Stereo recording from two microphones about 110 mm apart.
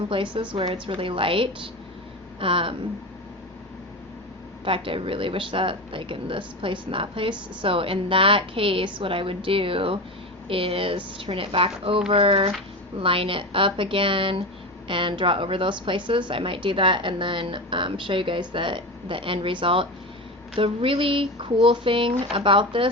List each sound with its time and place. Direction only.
0.1 s speech: 50° right (ahead or behind)
4.6 s a woman's voice: 55° right (ahead or behind)